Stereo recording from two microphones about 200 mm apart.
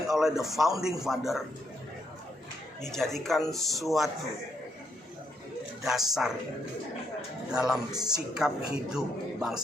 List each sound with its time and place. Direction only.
0.1 s a man's voice: centre (ahead or behind)
2.8 s a man's voice: centre (ahead or behind)
5.8 s a man's voice: centre (ahead or behind)